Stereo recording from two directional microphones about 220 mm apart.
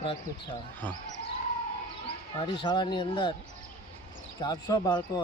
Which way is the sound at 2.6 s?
20° left (ahead or behind).